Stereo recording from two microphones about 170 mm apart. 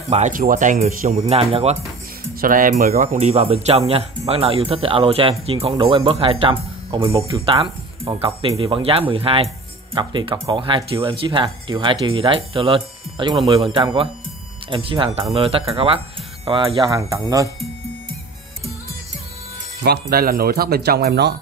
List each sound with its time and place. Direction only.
0.1 s speech: 50° right (ahead or behind)
1.3 s speech: 35° right (ahead or behind)
2.4 s speech: 55° right (ahead or behind); by 17.5 s 20° right (ahead or behind)
19.8 s speech: 65° right (ahead or behind)